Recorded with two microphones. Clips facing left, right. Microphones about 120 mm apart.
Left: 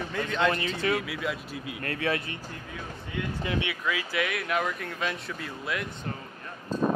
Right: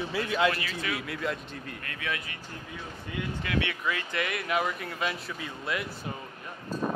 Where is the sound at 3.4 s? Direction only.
25° left (ahead or behind).